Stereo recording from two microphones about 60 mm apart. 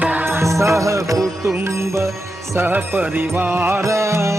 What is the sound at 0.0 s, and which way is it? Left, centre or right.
Music, right.